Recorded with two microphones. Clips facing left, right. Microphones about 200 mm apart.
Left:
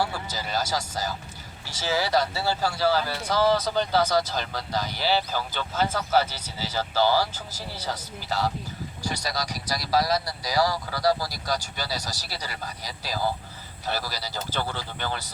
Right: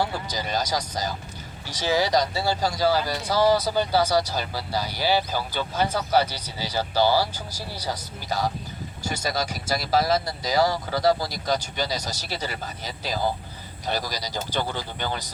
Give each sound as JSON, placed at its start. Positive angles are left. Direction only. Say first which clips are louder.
{"t": 0.0, "sound": "speech", "louder": "right 2 dB", "side_deg": -20}